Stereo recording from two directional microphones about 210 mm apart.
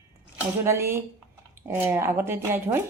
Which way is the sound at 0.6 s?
10° right (ahead or behind).